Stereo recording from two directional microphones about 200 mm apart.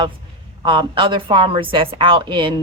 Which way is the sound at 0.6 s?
25° right (ahead or behind).